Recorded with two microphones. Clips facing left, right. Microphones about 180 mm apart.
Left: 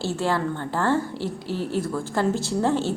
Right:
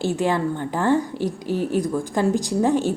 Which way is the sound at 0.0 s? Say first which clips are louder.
Right 3 dB; 15° right (ahead or behind).